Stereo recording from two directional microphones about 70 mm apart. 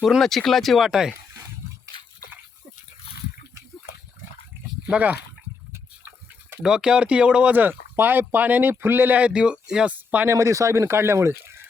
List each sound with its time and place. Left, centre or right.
0.2 s speech: centre
4.9 s speech: right
6.6 s speech: centre
7.5 s speech: right
9.1 s speech: centre
9.9 s speech: right
10.2 s speech: right